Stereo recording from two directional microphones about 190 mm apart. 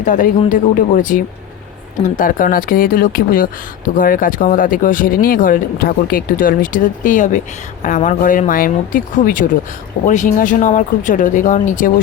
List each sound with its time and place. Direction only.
0.0 s speech: 45° left (ahead or behind)